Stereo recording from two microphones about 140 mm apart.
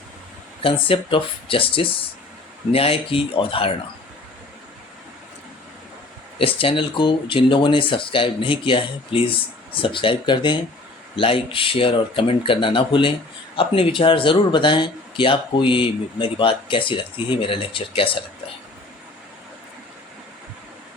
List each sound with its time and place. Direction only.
0.6 s speech: 40° left (ahead or behind)
6.4 s speech: 40° left (ahead or behind)